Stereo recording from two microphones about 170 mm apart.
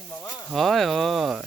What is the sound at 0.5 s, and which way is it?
Speech, centre (ahead or behind).